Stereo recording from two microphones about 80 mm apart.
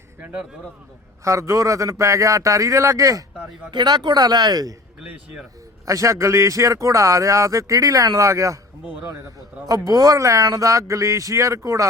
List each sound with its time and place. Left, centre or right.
0.2 s a man's voice: right
1.2 s a man's voice: right
3.7 s speech: right
5.8 s a man's voice: right
9.6 s a man's voice: right